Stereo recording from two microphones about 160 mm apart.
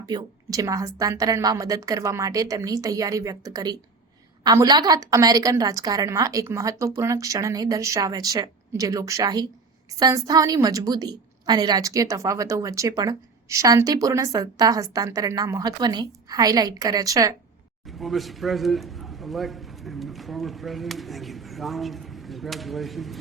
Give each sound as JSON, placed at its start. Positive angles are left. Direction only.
{"t": 0.0, "sound": "a woman's voice", "side_deg": -25}
{"t": 17.8, "sound": "a man's voice", "side_deg": 0}